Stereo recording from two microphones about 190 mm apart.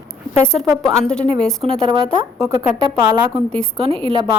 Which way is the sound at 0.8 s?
5° left (ahead or behind).